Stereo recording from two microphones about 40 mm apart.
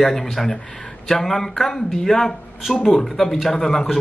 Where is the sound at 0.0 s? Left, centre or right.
Centre.